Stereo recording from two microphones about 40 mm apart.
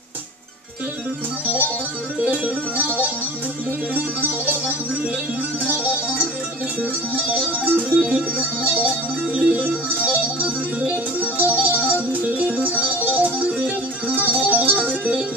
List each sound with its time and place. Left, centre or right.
2.3 s music: right
5.7 s music: right
7.9 s music: centre
8.4 s music: right
11.1 s music: right